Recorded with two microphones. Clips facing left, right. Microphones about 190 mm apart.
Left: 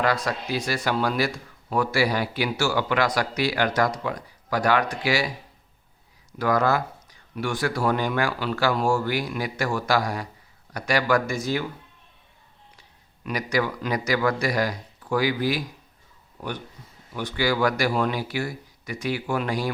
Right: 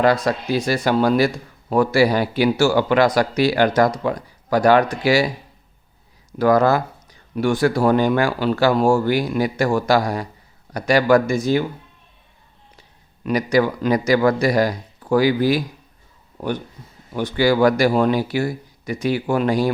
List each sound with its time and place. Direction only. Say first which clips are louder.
0.0 s speech: right 7 dB; 25° right (ahead or behind)
6.4 s speech: right 7 dB; 35° right (ahead or behind)
13.2 s speech: right 8 dB; 30° right (ahead or behind)
17.2 s speech: right 7 dB; 30° right (ahead or behind)